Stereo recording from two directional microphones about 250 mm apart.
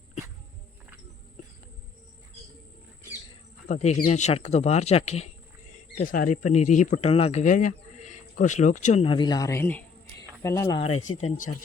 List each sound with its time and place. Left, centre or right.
3.7 s speech: left